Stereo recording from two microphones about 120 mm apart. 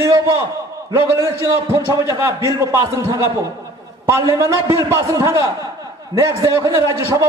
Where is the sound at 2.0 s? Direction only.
25° right (ahead or behind).